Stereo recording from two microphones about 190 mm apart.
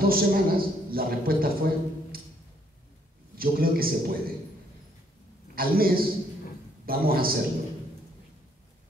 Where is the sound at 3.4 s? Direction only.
50° right (ahead or behind).